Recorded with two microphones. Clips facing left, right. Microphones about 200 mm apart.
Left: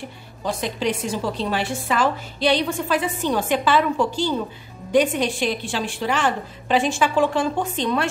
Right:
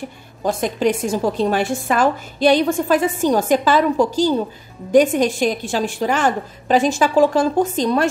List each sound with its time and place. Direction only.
0.4 s a woman's voice: 45° right (ahead or behind)